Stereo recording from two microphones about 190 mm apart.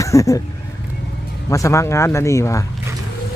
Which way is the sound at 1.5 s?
15° left (ahead or behind).